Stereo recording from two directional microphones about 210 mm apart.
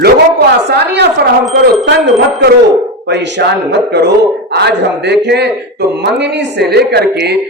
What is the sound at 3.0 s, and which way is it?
Speech, 55° right (ahead or behind).